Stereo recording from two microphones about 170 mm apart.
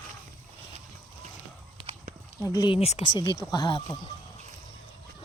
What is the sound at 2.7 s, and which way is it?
Speech, 40° left (ahead or behind).